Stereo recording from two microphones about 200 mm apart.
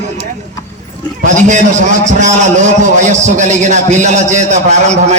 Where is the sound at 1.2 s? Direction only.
40° right (ahead or behind).